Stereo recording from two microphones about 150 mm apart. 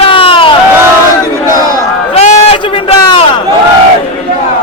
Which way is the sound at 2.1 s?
45° left (ahead or behind).